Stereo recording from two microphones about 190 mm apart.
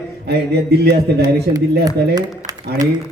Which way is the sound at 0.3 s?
60° right (ahead or behind).